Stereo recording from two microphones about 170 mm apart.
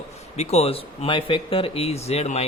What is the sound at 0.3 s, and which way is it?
Speech, 35° left (ahead or behind).